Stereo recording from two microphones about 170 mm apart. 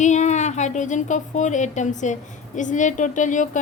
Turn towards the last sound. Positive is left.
turn(degrees=50)  # may be behind; listen again after turning